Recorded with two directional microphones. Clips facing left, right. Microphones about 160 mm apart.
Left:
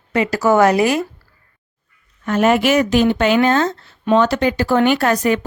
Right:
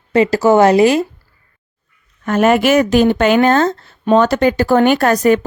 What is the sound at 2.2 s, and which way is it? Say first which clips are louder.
Speech: right 2 dB; 50° right (ahead or behind).